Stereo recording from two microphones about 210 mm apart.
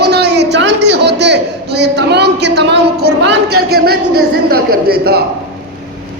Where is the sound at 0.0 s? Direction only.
50° right (ahead or behind).